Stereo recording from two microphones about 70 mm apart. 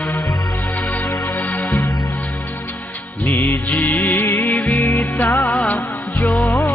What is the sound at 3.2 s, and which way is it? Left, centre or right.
Music, left.